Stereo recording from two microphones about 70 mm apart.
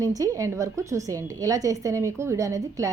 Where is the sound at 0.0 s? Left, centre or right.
Right.